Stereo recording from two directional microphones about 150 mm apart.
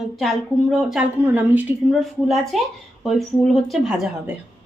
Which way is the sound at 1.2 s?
10° right (ahead or behind).